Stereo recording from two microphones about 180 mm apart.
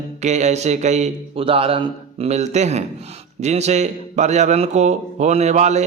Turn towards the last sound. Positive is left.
turn(degrees=-40)  # may be behind; listen again after turning